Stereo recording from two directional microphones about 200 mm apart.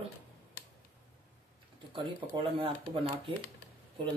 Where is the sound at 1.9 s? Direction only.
25° right (ahead or behind).